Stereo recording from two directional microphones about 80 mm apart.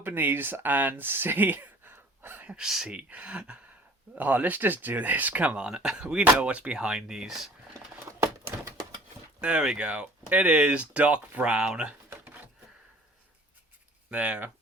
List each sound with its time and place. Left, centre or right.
0.0 s speech: right
2.5 s speech: centre
7.9 s a sound: right
9.4 s speech: centre
14.1 s speech: centre